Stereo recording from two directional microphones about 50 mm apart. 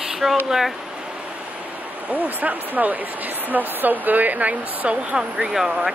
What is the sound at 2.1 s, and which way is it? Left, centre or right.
Speech, right.